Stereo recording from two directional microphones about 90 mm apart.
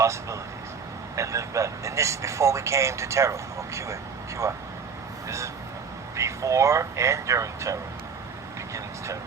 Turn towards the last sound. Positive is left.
turn(degrees=-35)  # may be behind; listen again after turning